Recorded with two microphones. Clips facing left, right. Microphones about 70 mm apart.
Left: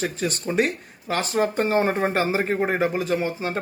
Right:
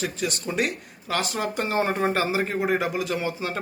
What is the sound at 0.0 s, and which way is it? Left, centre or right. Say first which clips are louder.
Speech: left 2 dB; left.